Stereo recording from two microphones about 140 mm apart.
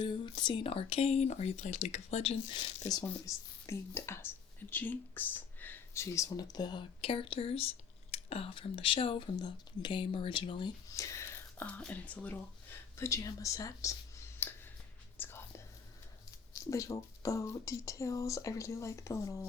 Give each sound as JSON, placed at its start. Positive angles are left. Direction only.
{"t": 0.0, "sound": "speech", "side_deg": 35}
{"t": 2.9, "sound": "speech", "side_deg": 20}
{"t": 10.9, "sound": "whispering", "side_deg": 20}
{"t": 11.8, "sound": "speech", "side_deg": 10}
{"t": 13.0, "sound": "speech", "side_deg": 25}
{"t": 14.3, "sound": "a sound", "side_deg": 15}
{"t": 15.2, "sound": "whispering", "side_deg": 15}
{"t": 16.6, "sound": "speech", "side_deg": 25}